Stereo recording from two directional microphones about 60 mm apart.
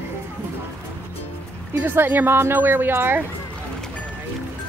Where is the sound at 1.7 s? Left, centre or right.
Right.